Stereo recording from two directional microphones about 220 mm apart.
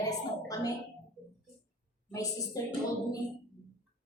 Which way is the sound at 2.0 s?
15° left (ahead or behind).